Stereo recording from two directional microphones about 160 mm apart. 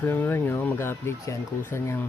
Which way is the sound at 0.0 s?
15° left (ahead or behind).